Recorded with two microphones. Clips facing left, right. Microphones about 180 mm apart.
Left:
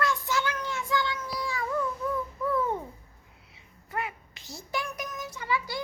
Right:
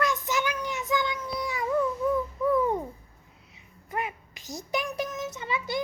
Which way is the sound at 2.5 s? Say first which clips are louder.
Right 4 dB; 15° right (ahead or behind).